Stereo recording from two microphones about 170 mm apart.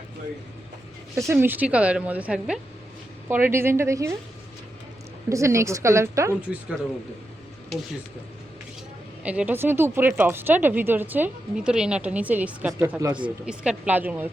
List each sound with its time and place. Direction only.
1.3 s speech: 10° right (ahead or behind)
5.3 s speech: 15° right (ahead or behind)
9.2 s speech: 10° right (ahead or behind)